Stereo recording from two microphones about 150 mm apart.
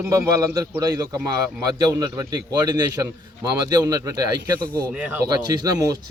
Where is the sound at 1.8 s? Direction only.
25° right (ahead or behind).